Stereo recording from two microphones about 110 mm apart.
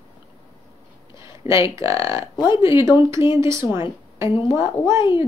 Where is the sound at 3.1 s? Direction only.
25° right (ahead or behind).